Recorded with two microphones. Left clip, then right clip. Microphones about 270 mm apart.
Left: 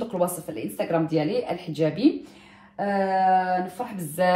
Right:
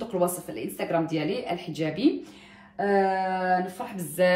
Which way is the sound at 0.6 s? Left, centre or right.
Centre.